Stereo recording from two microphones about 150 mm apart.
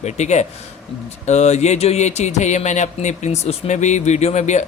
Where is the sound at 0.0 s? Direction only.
50° left (ahead or behind).